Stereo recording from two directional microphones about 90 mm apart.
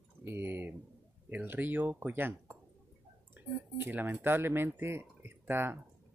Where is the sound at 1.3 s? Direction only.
20° right (ahead or behind).